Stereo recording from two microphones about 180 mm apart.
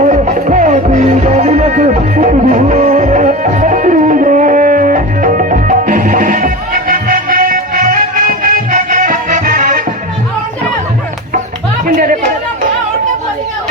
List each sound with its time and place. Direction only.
0.0 s music: 45° right (ahead or behind)
11.9 s chatter: 50° right (ahead or behind)